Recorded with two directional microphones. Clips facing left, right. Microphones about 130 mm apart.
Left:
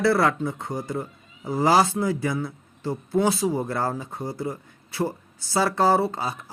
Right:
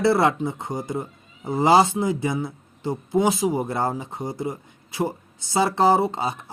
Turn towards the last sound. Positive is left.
turn(degrees=-20)  # may be behind; listen again after turning